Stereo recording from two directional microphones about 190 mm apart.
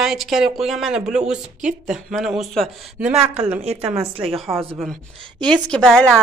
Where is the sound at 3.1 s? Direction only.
35° right (ahead or behind).